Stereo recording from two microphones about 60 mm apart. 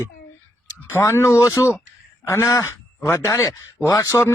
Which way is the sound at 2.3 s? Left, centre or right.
Left.